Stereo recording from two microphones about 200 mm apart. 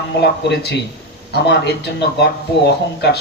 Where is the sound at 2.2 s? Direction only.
55° left (ahead or behind).